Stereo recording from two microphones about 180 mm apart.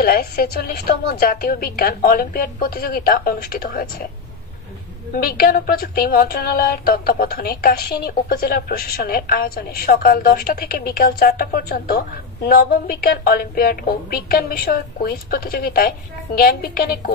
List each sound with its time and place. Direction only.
0.0 s a woman's voice: 60° left (ahead or behind)
5.1 s a woman's voice: 55° left (ahead or behind)